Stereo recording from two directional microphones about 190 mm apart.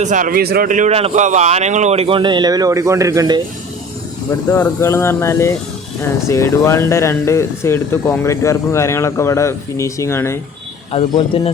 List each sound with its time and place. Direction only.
0.0 s a man's voice: 40° right (ahead or behind); by 3.4 s 20° right (ahead or behind)
4.3 s speech: 15° left (ahead or behind)
10.9 s speech: 30° left (ahead or behind)